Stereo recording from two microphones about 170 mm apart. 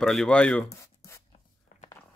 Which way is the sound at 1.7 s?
50° left (ahead or behind).